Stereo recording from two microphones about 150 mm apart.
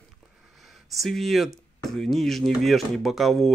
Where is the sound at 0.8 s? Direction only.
Centre (ahead or behind).